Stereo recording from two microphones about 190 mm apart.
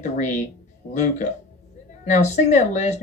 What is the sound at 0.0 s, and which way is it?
Speech, 40° left (ahead or behind).